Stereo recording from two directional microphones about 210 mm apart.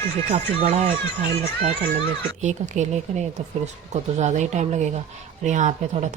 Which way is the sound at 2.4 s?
35° right (ahead or behind).